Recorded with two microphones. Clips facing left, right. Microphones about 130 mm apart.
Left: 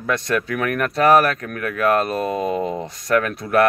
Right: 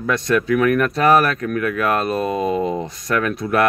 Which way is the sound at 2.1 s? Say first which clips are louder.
Right 2 dB; 20° right (ahead or behind).